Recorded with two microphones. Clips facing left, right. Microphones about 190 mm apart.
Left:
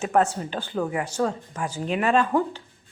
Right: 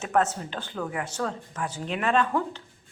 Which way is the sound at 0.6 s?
25° left (ahead or behind).